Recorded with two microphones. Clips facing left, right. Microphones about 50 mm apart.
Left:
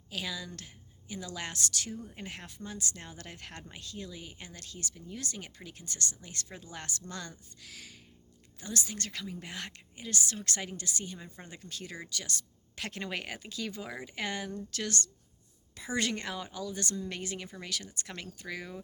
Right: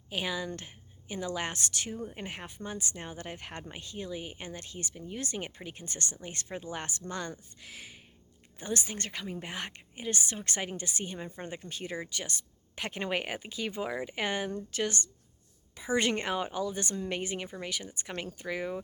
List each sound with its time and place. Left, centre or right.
0.1 s a woman's voice: right